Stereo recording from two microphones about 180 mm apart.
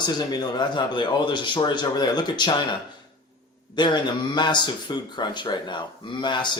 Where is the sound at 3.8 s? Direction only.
25° left (ahead or behind).